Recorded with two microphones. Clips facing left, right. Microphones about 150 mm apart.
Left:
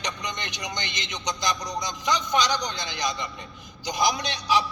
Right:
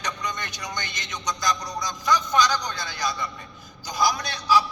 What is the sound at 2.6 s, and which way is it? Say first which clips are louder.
A man's voice: even; 20° left (ahead or behind).